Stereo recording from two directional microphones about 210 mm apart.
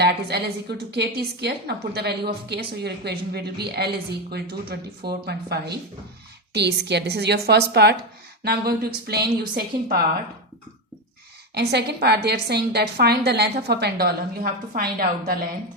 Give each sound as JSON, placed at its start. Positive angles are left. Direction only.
{"t": 0.0, "sound": "a woman's voice", "side_deg": -50}
{"t": 11.5, "sound": "a woman's voice", "side_deg": -50}